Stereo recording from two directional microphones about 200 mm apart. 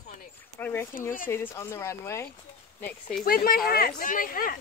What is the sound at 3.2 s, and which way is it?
Speech, 45° left (ahead or behind).